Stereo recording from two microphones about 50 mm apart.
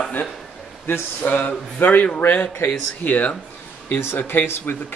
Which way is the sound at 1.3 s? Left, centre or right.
Left.